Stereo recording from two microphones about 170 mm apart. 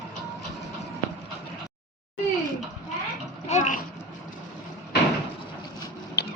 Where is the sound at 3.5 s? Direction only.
45° left (ahead or behind).